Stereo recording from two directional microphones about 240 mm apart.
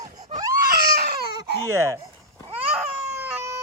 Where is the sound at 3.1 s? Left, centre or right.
Centre.